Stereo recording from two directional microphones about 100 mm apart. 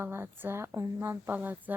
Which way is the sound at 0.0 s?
20° right (ahead or behind).